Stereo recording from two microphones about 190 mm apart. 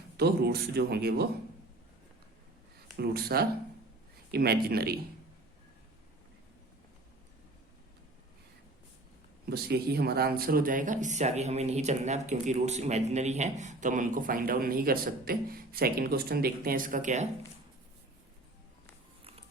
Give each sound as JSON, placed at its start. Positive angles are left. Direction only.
{"t": 0.2, "sound": "speech", "side_deg": -60}
{"t": 3.0, "sound": "speech", "side_deg": -55}
{"t": 9.5, "sound": "speech", "side_deg": -55}